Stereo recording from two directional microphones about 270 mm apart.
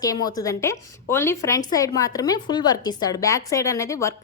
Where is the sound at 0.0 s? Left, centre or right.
Centre.